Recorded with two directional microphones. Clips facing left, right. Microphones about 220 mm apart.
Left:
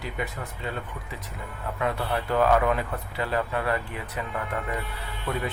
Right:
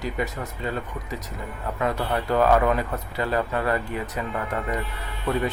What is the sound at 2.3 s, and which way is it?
Speech, 40° right (ahead or behind).